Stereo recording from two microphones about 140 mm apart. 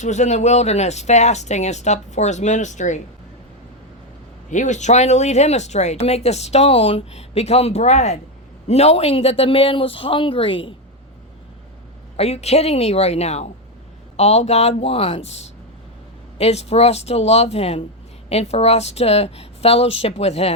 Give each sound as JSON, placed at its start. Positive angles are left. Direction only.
{"t": 0.0, "sound": "speech", "side_deg": 55}
{"t": 4.5, "sound": "speech", "side_deg": 60}
{"t": 12.1, "sound": "speech", "side_deg": 45}